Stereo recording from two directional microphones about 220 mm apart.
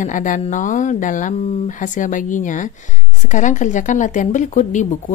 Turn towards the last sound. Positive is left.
turn(degrees=35)  # may be behind; listen again after turning